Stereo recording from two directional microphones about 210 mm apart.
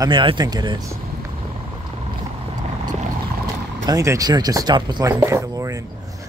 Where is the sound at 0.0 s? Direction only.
25° right (ahead or behind).